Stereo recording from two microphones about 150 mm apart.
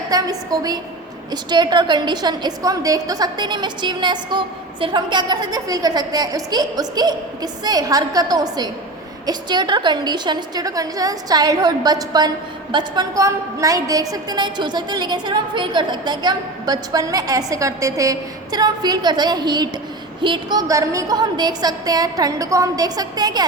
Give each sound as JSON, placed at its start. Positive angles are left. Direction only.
{"t": 0.1, "sound": "a woman's voice", "side_deg": -25}